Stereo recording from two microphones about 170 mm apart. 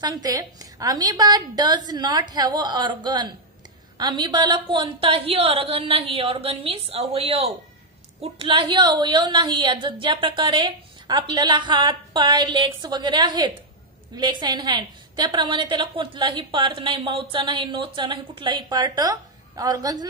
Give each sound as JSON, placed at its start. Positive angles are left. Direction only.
{"t": 0.0, "sound": "a woman's voice", "side_deg": -20}